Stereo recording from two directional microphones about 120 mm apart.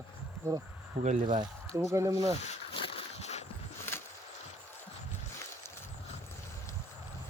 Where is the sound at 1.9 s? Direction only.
25° right (ahead or behind).